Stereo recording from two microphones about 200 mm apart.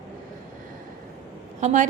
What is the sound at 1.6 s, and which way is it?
Speech, 35° right (ahead or behind).